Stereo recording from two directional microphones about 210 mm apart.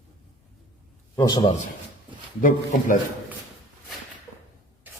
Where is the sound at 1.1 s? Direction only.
20° left (ahead or behind).